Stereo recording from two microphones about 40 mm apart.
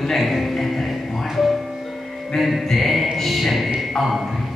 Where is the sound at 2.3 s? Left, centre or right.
Centre.